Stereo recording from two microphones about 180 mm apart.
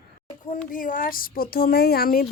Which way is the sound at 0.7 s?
50° left (ahead or behind).